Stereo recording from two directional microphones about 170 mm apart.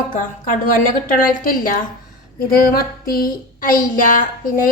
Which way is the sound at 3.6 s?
55° left (ahead or behind).